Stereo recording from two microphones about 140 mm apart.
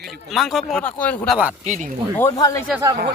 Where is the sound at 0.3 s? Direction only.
Centre (ahead or behind).